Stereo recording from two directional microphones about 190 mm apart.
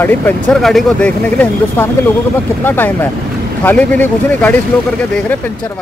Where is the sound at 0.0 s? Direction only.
10° left (ahead or behind).